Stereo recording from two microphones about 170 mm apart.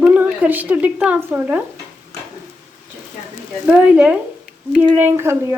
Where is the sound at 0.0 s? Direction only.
10° right (ahead or behind).